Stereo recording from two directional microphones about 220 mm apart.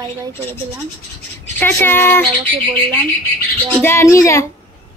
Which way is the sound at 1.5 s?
10° left (ahead or behind).